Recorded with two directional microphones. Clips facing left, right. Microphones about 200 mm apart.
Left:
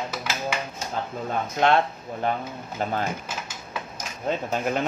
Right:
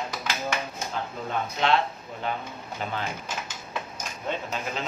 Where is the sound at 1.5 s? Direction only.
50° left (ahead or behind).